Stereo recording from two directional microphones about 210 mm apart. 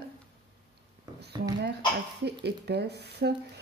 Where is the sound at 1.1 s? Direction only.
20° right (ahead or behind).